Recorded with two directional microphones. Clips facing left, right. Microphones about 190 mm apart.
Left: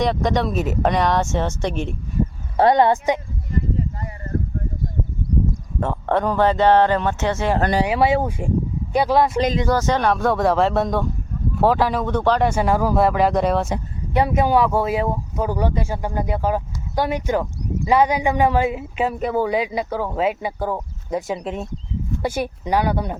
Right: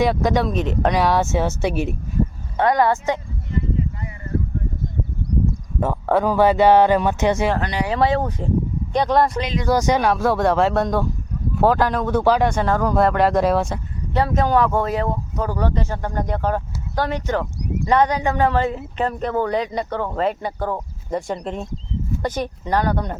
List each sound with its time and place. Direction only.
0.0 s speech: 5° right (ahead or behind)
2.6 s speech: 25° left (ahead or behind)
5.8 s speech: 5° right (ahead or behind)
7.9 s speech: 10° left (ahead or behind)
9.6 s speech: 15° right (ahead or behind)
12.5 s speech: 10° left (ahead or behind)
13.7 s speech: 20° left (ahead or behind)